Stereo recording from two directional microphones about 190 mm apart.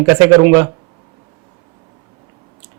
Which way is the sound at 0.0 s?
15° right (ahead or behind).